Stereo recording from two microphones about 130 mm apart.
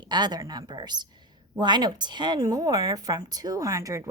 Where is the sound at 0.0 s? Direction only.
35° right (ahead or behind).